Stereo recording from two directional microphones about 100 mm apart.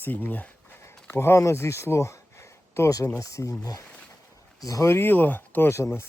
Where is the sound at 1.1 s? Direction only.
25° left (ahead or behind).